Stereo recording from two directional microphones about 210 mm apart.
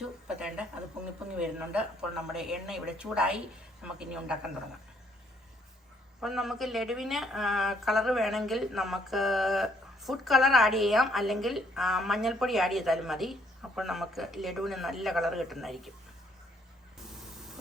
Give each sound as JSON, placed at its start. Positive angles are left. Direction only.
{"t": 0.0, "sound": "a woman's voice", "side_deg": -5}
{"t": 6.1, "sound": "a woman's voice", "side_deg": 0}